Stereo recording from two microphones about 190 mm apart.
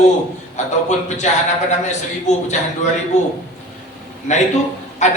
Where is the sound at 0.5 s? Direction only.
40° left (ahead or behind).